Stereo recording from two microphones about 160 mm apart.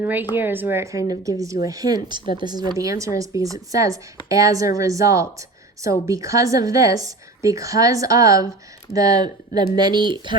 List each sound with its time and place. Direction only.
0.0 s speech: 10° right (ahead or behind); by 10.3 s 25° right (ahead or behind)